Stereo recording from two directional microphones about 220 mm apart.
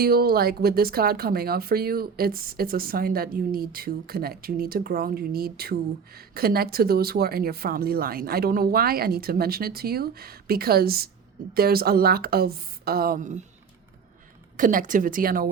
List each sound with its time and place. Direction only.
0.0 s speech: 45° right (ahead or behind)
14.5 s speech: 35° right (ahead or behind)